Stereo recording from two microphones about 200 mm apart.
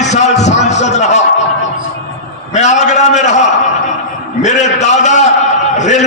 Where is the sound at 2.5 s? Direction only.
35° left (ahead or behind).